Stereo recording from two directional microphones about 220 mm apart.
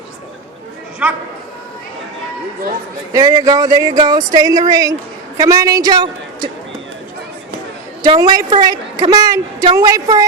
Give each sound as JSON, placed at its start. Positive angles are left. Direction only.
{"t": 3.1, "sound": "a woman's voice", "side_deg": -15}
{"t": 8.0, "sound": "a woman's voice", "side_deg": -15}